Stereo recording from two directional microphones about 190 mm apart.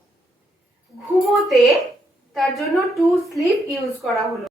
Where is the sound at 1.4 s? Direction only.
Centre (ahead or behind).